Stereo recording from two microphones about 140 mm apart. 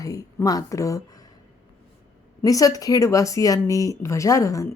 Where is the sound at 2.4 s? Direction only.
25° left (ahead or behind).